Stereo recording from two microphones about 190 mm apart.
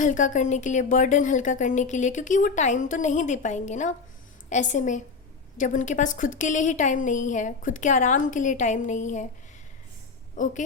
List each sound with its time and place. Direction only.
0.0 s speech: 40° left (ahead or behind)
10.3 s a woman's voice: 40° left (ahead or behind)